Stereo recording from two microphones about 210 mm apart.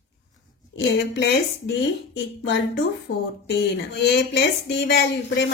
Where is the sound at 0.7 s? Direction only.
60° left (ahead or behind).